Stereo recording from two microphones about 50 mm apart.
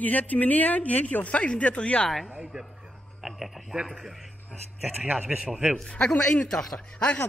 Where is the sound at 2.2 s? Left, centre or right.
Centre.